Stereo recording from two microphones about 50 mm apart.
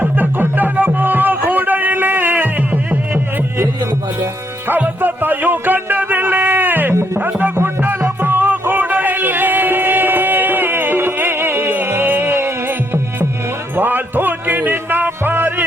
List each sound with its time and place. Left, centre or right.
0.0 s music: right
4.7 s music: right